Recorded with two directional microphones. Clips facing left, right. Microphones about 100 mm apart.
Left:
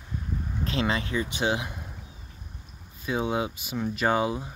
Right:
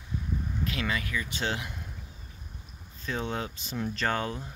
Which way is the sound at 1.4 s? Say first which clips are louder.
Left 6 dB; 15° left (ahead or behind).